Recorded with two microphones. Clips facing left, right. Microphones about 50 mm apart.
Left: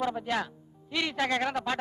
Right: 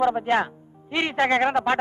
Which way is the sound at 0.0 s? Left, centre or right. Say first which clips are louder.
Right 9 dB; right.